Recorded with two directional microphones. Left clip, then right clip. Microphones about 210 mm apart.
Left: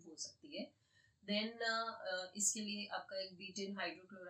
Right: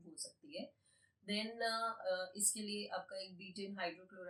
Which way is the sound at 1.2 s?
5° left (ahead or behind).